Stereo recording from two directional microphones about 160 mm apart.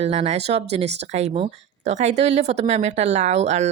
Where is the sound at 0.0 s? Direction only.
40° right (ahead or behind).